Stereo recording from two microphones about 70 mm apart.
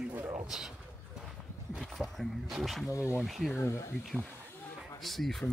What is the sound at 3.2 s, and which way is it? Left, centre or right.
Speech, centre.